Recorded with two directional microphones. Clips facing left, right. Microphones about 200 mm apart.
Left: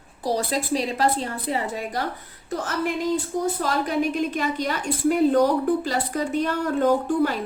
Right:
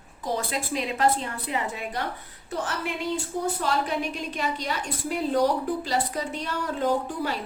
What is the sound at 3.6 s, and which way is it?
A woman's voice, 45° left (ahead or behind).